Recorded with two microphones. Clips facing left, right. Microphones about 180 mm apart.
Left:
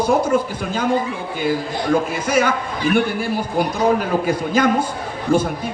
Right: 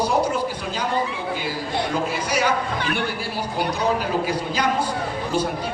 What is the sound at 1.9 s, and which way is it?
Speech, 50° left (ahead or behind).